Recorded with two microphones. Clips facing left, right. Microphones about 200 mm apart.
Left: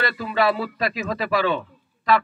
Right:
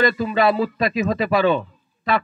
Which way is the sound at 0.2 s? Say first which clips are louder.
Right 4 dB; 20° right (ahead or behind).